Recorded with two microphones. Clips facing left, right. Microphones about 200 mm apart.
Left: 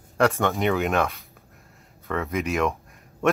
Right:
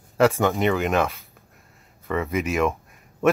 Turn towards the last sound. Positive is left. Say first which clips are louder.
# right 2 dB
turn(degrees=0)  # may be behind; listen again after turning